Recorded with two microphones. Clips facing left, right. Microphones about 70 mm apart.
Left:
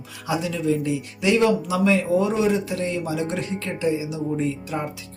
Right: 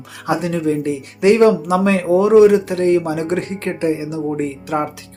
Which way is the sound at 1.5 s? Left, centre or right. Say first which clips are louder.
Right 4 dB; right.